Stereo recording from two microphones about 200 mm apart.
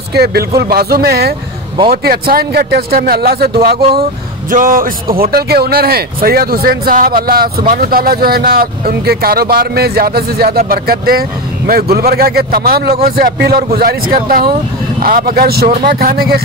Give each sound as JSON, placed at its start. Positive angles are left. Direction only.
{"t": 0.1, "sound": "speech", "side_deg": -55}